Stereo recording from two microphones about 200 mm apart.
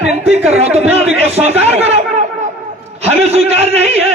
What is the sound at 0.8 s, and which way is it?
Speech, 10° right (ahead or behind).